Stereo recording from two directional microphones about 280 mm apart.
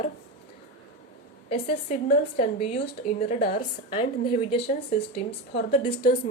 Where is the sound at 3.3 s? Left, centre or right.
Left.